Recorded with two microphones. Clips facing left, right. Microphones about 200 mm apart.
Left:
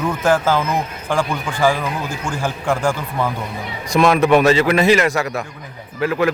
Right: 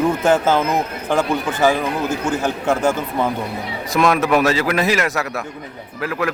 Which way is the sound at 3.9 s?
Centre (ahead or behind).